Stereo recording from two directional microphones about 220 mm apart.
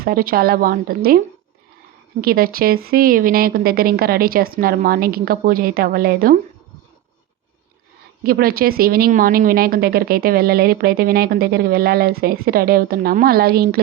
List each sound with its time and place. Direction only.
0.0 s a woman's voice: 40° right (ahead or behind)
2.2 s a woman's voice: 40° right (ahead or behind)
8.2 s speech: 40° right (ahead or behind)